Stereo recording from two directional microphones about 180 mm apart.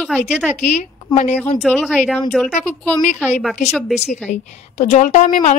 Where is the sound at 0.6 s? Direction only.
40° left (ahead or behind).